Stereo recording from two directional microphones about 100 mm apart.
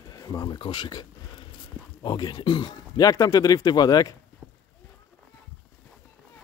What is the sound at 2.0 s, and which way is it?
Speech, 45° left (ahead or behind).